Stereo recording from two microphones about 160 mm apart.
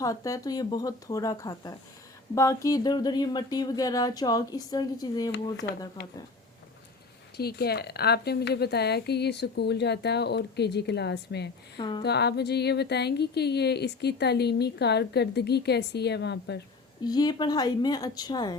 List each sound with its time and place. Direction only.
0.0 s speech: 20° left (ahead or behind)
7.3 s speech: 85° left
11.8 s speech: 30° left (ahead or behind)
12.0 s speech: 90° left
17.0 s speech: 25° left (ahead or behind)